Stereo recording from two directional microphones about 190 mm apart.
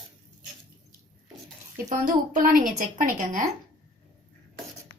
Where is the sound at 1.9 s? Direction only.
45° right (ahead or behind).